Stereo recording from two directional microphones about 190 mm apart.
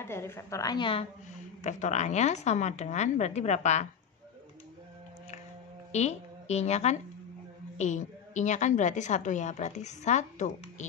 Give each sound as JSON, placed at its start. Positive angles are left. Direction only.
{"t": 0.0, "sound": "a woman's voice", "side_deg": 15}
{"t": 1.6, "sound": "a woman's voice", "side_deg": 40}
{"t": 5.9, "sound": "a woman's voice", "side_deg": 35}